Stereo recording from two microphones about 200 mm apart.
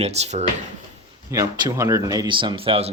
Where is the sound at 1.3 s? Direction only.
15° right (ahead or behind).